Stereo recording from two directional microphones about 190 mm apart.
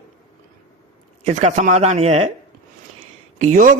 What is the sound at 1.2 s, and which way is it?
A man's voice, 40° right (ahead or behind).